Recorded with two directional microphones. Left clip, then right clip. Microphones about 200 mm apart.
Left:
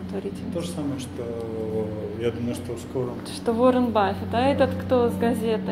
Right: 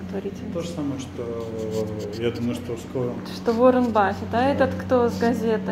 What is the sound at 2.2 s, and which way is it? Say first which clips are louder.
Speech: right 1 dB; 35° right (ahead or behind).